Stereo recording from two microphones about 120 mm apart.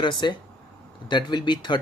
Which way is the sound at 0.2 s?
40° left (ahead or behind).